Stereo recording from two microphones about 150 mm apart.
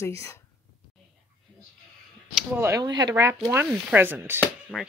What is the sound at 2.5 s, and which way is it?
Chopping, 15° right (ahead or behind).